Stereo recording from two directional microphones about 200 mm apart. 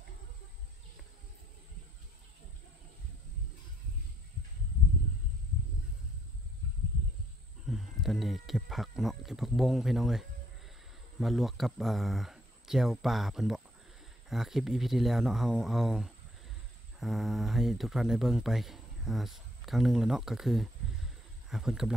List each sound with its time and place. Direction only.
7.6 s speech: centre (ahead or behind)